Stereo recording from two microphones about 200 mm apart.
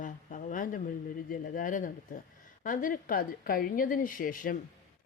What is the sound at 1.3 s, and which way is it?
Speech, 40° left (ahead or behind).